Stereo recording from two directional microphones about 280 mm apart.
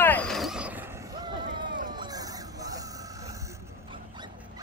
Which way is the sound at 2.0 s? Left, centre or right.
Centre.